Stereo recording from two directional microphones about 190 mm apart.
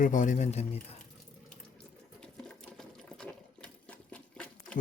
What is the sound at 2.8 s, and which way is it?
Sewing machine, 5° left (ahead or behind).